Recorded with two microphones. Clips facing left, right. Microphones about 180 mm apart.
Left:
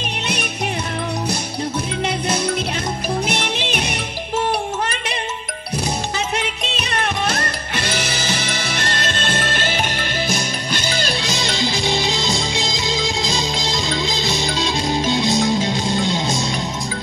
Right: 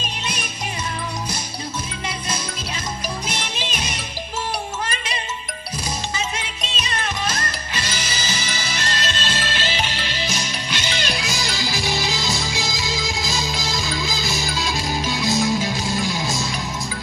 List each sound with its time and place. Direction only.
0.0 s music: 65° left (ahead or behind)
2.0 s music: 65° left (ahead or behind); by 11.2 s 35° left (ahead or behind)
11.3 s music: 20° left (ahead or behind)